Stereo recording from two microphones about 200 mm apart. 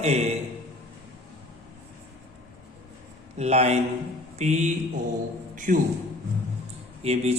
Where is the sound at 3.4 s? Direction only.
35° right (ahead or behind).